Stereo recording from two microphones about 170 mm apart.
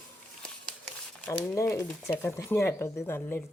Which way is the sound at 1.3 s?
15° left (ahead or behind).